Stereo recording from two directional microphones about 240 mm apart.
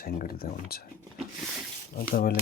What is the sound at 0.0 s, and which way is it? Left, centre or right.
Speech, left.